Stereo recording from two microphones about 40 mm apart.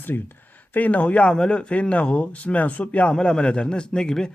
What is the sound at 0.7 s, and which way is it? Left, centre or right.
Speech, left.